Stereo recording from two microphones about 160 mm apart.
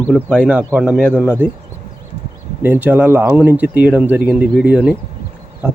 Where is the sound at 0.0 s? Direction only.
5° left (ahead or behind).